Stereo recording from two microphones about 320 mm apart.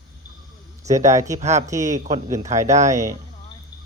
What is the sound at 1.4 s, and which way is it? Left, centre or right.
Speech, right.